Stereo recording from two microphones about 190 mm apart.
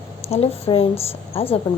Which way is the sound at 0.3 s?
35° left (ahead or behind).